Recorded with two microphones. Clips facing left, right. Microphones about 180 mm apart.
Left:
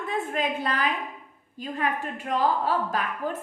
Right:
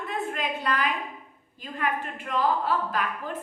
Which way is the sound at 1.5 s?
45° left (ahead or behind).